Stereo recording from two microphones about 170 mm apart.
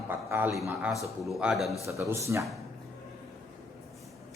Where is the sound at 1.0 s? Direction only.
Centre (ahead or behind).